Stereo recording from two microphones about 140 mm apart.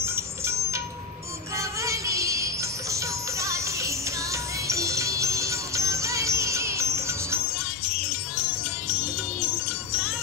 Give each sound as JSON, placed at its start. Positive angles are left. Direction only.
{"t": 0.0, "sound": "music", "side_deg": -20}